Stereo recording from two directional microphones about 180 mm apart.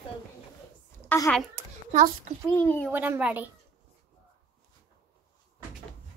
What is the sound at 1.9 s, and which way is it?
Speech, 45° right (ahead or behind).